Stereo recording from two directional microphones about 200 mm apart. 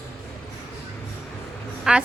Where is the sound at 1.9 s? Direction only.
5° right (ahead or behind).